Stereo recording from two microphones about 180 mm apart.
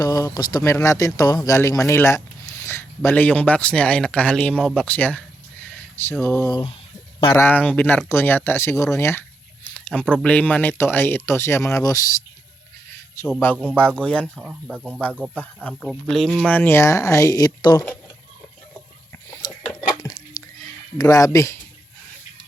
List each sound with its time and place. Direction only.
0.0 s speech: 20° left (ahead or behind)
5.7 s a sound: 10° left (ahead or behind)
6.5 s speech: 25° left (ahead or behind)
7.3 s speech: 10° left (ahead or behind)
13.4 s speech: 10° left (ahead or behind)
19.4 s a sound: 20° left (ahead or behind)
21.0 s speech: 20° left (ahead or behind)